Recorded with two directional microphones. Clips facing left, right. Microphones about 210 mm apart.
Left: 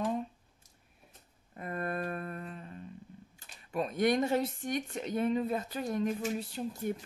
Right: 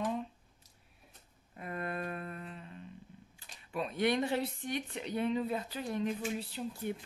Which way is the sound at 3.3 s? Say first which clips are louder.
Left 4 dB; 45° left (ahead or behind).